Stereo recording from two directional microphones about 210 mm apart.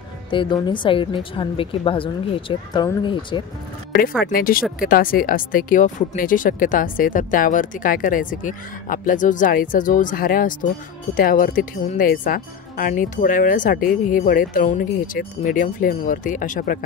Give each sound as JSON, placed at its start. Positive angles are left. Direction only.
{"t": 0.3, "sound": "speech", "side_deg": 20}
{"t": 4.3, "sound": "speech", "side_deg": 45}